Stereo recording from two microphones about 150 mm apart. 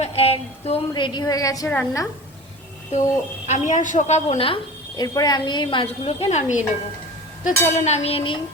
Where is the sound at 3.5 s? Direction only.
55° left (ahead or behind).